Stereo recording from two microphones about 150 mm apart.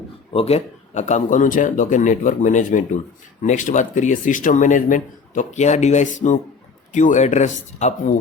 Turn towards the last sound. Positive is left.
turn(degrees=50)  # may be behind; listen again after turning